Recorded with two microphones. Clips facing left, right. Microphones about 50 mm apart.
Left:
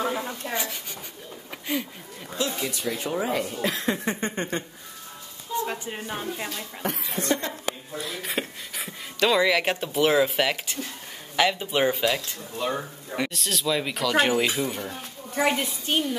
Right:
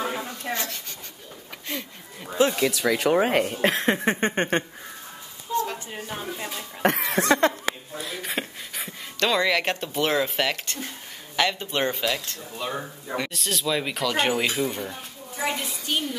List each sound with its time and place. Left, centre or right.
0.0 s a sound: centre
0.5 s speech: centre
2.5 s speech: right
5.6 s speech: centre
6.8 s speech: right
7.9 s speech: centre
15.3 s a woman's voice: left